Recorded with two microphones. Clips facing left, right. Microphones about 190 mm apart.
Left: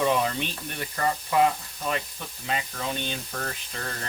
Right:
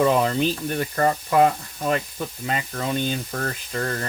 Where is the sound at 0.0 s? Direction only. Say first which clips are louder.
Right 6 dB; 45° right (ahead or behind).